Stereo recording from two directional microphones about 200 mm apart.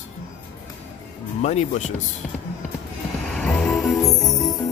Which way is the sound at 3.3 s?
5° left (ahead or behind).